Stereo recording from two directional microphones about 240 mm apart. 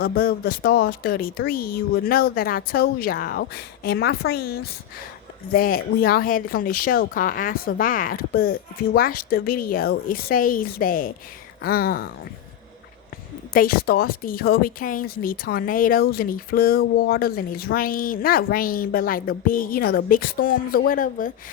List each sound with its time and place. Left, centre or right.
0.0 s a woman's voice: left
13.5 s a woman's voice: left